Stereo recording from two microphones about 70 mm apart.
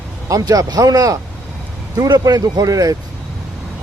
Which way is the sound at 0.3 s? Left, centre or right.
Right.